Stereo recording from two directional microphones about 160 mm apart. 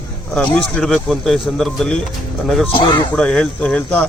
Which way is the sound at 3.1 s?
5° left (ahead or behind).